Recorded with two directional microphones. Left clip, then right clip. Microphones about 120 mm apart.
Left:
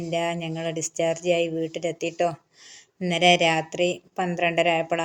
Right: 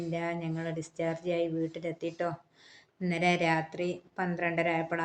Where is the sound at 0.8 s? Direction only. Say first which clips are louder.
Left 9 dB; 40° right (ahead or behind).